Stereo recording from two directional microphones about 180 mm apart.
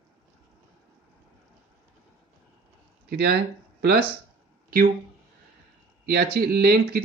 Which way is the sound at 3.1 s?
60° right (ahead or behind).